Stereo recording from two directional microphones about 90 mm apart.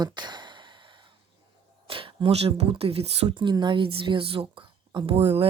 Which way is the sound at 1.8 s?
75° right (ahead or behind).